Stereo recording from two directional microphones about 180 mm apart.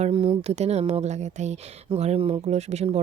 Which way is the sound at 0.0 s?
25° right (ahead or behind).